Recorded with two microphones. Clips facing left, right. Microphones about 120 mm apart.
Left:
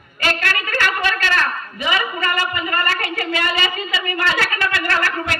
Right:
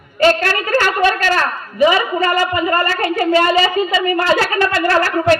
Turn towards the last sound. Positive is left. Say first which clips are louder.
# right 8 dB
turn(degrees=-30)  # may be behind; listen again after turning